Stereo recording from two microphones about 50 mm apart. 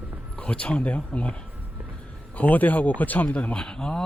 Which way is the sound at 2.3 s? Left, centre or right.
Left.